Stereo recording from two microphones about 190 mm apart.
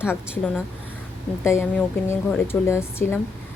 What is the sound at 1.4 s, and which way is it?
Speech, 10° left (ahead or behind).